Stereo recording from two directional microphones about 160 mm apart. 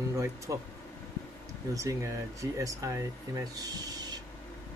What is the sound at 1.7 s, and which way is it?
Speech, 20° right (ahead or behind).